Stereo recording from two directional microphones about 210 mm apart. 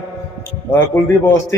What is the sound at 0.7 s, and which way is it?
Speech, 10° left (ahead or behind).